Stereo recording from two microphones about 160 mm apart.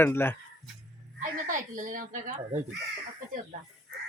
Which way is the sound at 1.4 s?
55° right (ahead or behind).